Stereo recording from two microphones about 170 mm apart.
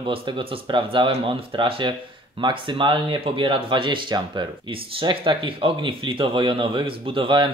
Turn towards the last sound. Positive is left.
turn(degrees=-30)  # may be behind; listen again after turning